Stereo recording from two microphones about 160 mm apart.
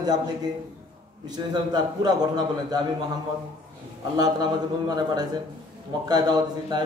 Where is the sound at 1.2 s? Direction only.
25° right (ahead or behind).